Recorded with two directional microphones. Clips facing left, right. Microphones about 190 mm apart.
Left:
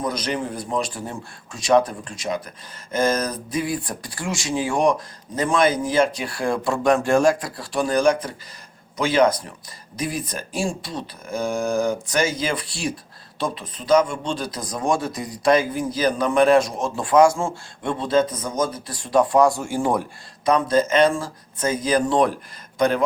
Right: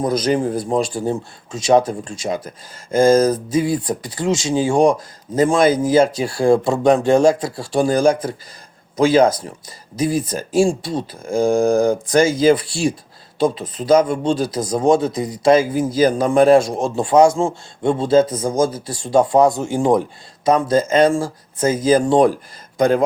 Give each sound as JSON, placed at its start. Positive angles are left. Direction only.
{"t": 0.0, "sound": "speech", "side_deg": -30}
{"t": 13.8, "sound": "speech", "side_deg": -30}
{"t": 16.0, "sound": "a man's voice", "side_deg": -45}
{"t": 16.3, "sound": "speech", "side_deg": -35}